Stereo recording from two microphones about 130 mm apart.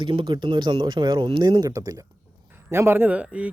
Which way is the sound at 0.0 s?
40° right (ahead or behind).